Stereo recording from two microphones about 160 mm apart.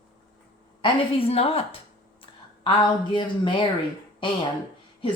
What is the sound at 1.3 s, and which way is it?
A woman's voice, 35° left (ahead or behind).